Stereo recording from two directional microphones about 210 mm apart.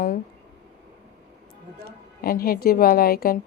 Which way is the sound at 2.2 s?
45° left (ahead or behind).